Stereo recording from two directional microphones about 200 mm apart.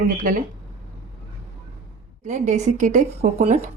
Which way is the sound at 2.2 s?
35° right (ahead or behind).